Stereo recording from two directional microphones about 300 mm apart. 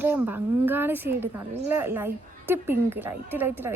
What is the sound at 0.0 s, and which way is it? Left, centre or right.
Speech, centre.